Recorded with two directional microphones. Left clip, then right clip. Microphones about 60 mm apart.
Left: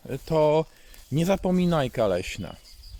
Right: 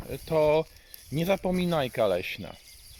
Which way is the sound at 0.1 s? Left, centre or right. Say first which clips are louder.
Left 2 dB; left.